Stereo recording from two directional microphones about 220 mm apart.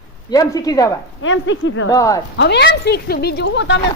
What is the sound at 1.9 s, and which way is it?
Speech, 15° left (ahead or behind).